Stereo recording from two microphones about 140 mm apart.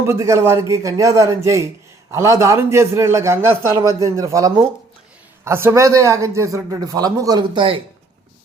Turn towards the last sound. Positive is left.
turn(degrees=-40)  # may be behind; listen again after turning